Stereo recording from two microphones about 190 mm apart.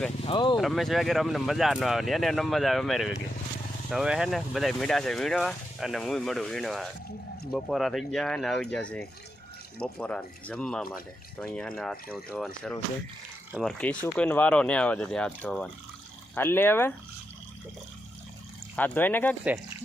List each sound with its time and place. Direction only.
0.3 s speech: 25° left (ahead or behind)
0.5 s speech: centre (ahead or behind)
13.5 s speech: centre (ahead or behind)
18.8 s speech: 10° left (ahead or behind)